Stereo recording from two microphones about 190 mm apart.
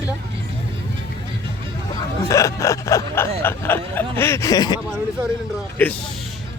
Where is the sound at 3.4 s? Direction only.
10° left (ahead or behind).